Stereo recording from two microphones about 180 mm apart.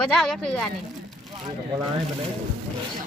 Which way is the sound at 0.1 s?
5° left (ahead or behind).